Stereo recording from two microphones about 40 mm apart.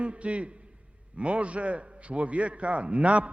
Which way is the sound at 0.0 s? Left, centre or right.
Right.